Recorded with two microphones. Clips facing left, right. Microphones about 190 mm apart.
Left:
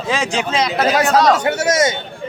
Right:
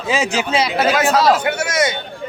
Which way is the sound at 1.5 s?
45° left (ahead or behind).